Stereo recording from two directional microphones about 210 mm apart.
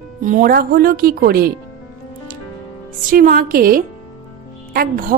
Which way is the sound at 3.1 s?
40° right (ahead or behind).